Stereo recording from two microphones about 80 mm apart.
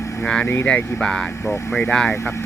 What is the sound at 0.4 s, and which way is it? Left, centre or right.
Speech, left.